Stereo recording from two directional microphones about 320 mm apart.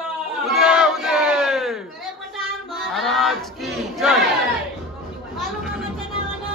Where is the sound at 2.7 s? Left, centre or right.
Centre.